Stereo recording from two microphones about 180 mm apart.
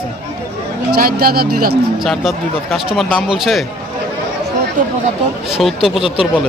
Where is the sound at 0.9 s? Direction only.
55° right (ahead or behind).